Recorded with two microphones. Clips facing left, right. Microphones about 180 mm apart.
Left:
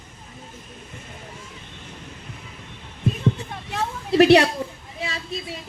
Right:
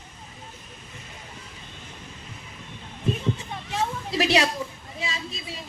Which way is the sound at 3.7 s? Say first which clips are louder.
Left 8 dB; 60° left (ahead or behind).